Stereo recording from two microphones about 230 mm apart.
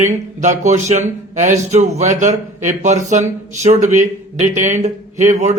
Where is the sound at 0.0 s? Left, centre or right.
Right.